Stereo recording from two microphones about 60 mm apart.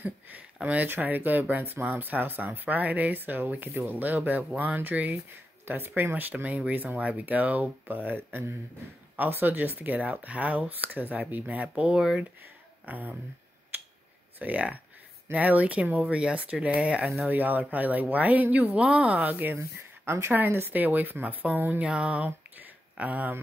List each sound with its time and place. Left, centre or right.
0.0 s speech: right
11.7 s speech: centre
12.8 s speech: right
14.4 s speech: right
20.1 s a woman's voice: right
20.3 s speech: right
21.8 s speech: centre